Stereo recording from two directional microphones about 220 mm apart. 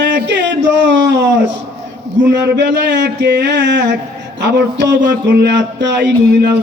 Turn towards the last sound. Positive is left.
turn(degrees=-50)  # may be behind; listen again after turning